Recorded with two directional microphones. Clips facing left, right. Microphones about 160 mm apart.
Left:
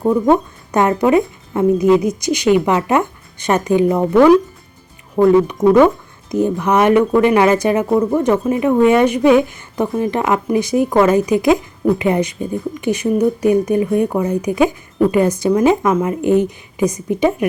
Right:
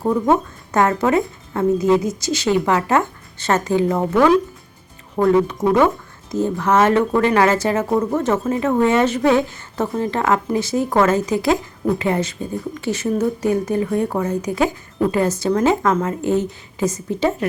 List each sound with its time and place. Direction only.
0.1 s speech: 15° left (ahead or behind)
5.2 s speech: centre (ahead or behind)
6.3 s speech: 15° left (ahead or behind)